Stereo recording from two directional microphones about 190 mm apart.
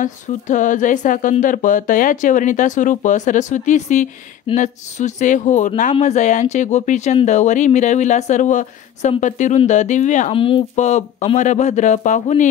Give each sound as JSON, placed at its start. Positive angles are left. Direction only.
{"t": 0.0, "sound": "speech", "side_deg": 40}
{"t": 10.3, "sound": "speech", "side_deg": 30}